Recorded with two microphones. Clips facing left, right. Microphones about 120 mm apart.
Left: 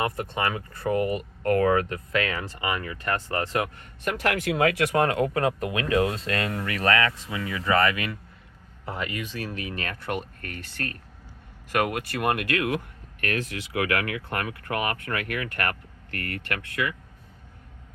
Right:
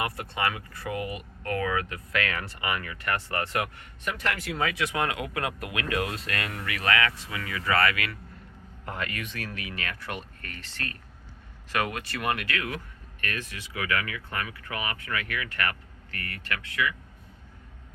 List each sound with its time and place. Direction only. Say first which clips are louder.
0.0 s speech: left 3 dB; 25° left (ahead or behind)
0.8 s speech: left 8 dB; 45° left (ahead or behind)
2.1 s speech: left 3 dB; 30° left (ahead or behind)
4.0 s speech: left 5 dB; 60° left (ahead or behind); by 9.2 s 15° left (ahead or behind)
9.6 s speech: left 3 dB; 35° left (ahead or behind)
13.2 s speech: left 6 dB; 85° left; by 16.9 s 50° left (ahead or behind)